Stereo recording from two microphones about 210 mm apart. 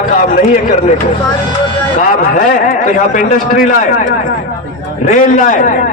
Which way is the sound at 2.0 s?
40° left (ahead or behind).